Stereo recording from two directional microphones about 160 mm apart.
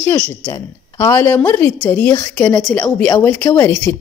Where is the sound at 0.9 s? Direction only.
15° left (ahead or behind).